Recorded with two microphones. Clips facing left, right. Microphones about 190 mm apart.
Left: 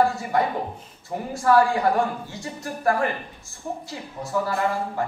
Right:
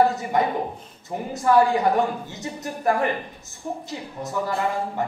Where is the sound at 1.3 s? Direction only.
20° right (ahead or behind).